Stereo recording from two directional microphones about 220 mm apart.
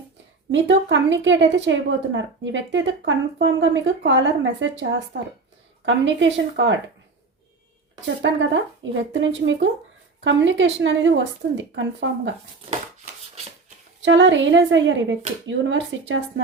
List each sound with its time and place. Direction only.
0.5 s a woman's voice: 55° right (ahead or behind)
8.2 s a woman's voice: 55° right (ahead or behind)
14.0 s a woman's voice: 55° right (ahead or behind)